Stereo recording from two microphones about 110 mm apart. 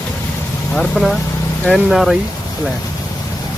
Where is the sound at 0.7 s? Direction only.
5° left (ahead or behind).